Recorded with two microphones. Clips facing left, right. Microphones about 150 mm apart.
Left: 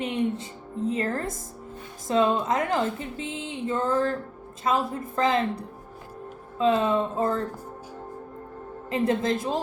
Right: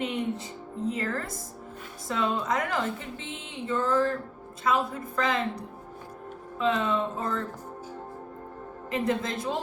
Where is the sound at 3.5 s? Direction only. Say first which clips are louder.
Left 1 dB; 30° left (ahead or behind).